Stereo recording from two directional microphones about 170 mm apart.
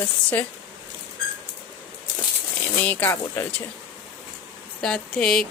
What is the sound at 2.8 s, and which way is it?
Speech, 10° left (ahead or behind).